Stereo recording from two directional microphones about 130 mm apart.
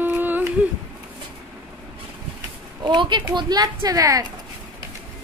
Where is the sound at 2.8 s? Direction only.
35° right (ahead or behind).